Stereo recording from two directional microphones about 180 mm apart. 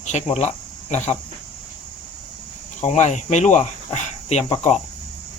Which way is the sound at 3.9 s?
40° left (ahead or behind).